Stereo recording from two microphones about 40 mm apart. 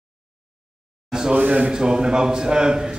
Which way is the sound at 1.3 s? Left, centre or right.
Right.